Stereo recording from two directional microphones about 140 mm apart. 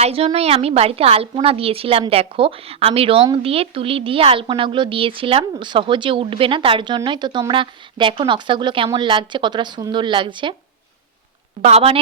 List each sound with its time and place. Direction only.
0.0 s a woman's voice: 45° right (ahead or behind)
11.6 s a woman's voice: 45° right (ahead or behind)